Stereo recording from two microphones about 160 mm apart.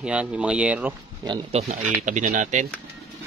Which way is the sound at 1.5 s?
45° right (ahead or behind).